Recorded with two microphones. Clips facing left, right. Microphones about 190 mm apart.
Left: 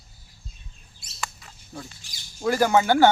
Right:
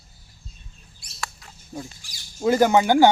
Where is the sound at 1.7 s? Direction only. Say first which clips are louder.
Right 4 dB; 15° right (ahead or behind).